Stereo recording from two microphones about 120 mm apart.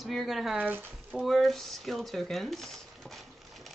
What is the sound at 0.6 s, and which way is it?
Speech, 15° right (ahead or behind).